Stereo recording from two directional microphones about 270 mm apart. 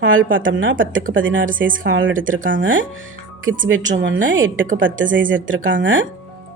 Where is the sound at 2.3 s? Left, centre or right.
Right.